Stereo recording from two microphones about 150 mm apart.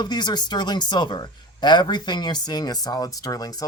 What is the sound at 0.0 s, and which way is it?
Speech, 30° left (ahead or behind).